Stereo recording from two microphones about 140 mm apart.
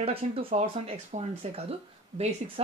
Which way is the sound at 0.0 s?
45° right (ahead or behind).